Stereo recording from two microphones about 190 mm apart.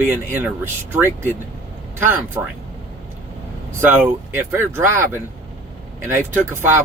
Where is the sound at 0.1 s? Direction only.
10° right (ahead or behind).